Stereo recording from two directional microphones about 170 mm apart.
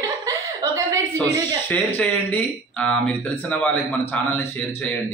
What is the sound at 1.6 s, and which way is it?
A man's voice, 10° left (ahead or behind).